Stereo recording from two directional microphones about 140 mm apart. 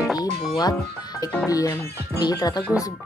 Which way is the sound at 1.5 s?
25° left (ahead or behind).